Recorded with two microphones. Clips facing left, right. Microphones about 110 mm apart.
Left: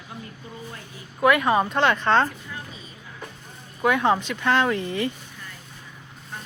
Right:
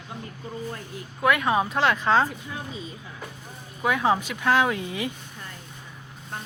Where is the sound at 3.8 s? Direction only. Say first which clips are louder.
Left 2 dB; centre (ahead or behind).